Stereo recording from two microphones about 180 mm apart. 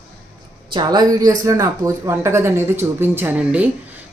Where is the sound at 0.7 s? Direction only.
25° right (ahead or behind).